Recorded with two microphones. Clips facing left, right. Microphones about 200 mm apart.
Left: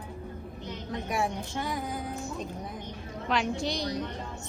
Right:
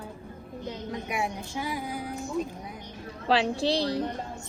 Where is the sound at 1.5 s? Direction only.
5° right (ahead or behind).